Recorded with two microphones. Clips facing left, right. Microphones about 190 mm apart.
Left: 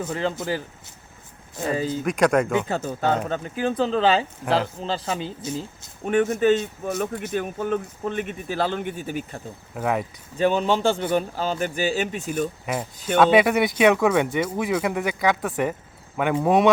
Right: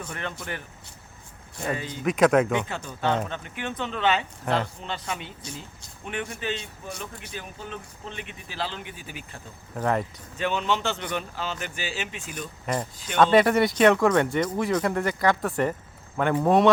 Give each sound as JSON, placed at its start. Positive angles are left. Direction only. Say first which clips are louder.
{"t": 0.0, "sound": "speech", "louder": "left 9 dB", "side_deg": 25}
{"t": 2.0, "sound": "speech", "louder": "right 1 dB", "side_deg": 0}
{"t": 2.6, "sound": "speech", "louder": "left 4 dB", "side_deg": 40}
{"t": 6.1, "sound": "speech", "louder": "left 13 dB", "side_deg": 45}
{"t": 9.7, "sound": "speech", "louder": "left 1 dB", "side_deg": 5}
{"t": 10.3, "sound": "speech", "louder": "left 6 dB", "side_deg": 40}
{"t": 12.6, "sound": "speech", "louder": "left 2 dB", "side_deg": 5}
{"t": 15.4, "sound": "speech", "louder": "left 1 dB", "side_deg": 0}